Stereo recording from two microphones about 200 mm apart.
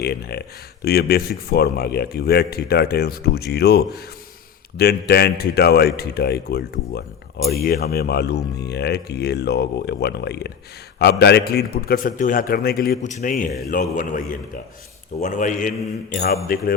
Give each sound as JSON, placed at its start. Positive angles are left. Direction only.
{"t": 0.0, "sound": "a man's voice", "side_deg": 55}